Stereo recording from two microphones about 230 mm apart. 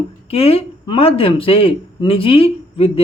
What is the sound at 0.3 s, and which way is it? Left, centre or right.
Speech, left.